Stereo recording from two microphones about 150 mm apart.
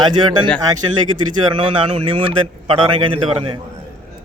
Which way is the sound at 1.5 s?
35° right (ahead or behind).